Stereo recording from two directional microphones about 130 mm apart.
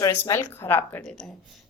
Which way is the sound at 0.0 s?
25° left (ahead or behind).